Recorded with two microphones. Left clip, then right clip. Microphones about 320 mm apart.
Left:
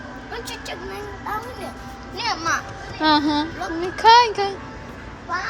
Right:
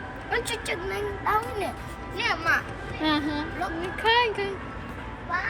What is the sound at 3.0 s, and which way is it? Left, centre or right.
A child's voice, centre.